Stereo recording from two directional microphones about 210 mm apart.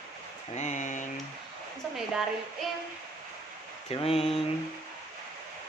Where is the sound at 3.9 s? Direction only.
30° left (ahead or behind).